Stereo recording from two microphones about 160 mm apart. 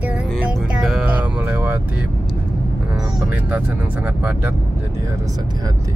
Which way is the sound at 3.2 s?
10° right (ahead or behind).